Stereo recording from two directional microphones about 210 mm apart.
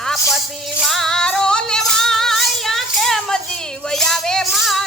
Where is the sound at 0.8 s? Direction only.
Centre (ahead or behind).